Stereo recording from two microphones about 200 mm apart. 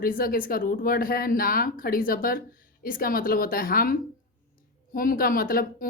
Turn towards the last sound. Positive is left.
turn(degrees=45)  # may be behind; listen again after turning